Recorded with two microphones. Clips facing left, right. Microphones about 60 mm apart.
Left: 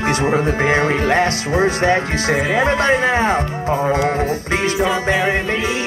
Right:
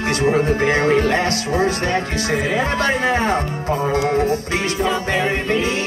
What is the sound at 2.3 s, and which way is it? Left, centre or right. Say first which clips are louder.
Speech: left 1 dB; centre.